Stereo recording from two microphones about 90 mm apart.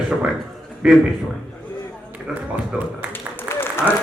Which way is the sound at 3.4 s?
30° left (ahead or behind).